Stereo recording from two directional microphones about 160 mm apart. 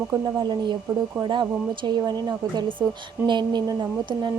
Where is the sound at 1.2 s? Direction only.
30° right (ahead or behind).